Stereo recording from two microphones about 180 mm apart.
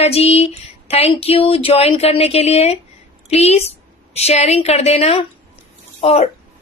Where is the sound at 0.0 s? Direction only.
35° left (ahead or behind).